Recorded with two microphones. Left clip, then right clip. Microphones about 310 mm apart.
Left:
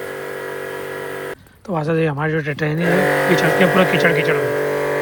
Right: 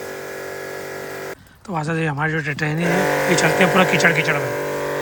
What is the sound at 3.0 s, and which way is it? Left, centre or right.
Speech, left.